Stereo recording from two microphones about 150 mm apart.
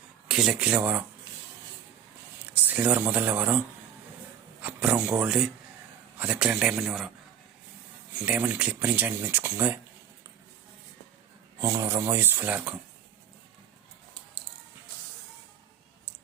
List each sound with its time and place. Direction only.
0.3 s speech: 5° right (ahead or behind)
2.5 s speech: 10° right (ahead or behind)
4.6 s a man's voice: 10° right (ahead or behind)
8.2 s speech: 10° right (ahead or behind)
11.6 s speech: 20° right (ahead or behind)